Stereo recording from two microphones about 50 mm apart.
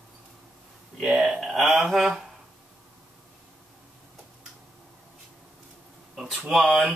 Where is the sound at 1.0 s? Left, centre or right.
Centre.